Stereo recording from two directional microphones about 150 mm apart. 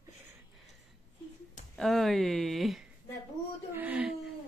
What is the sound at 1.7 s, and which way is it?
A woman's voice, centre (ahead or behind).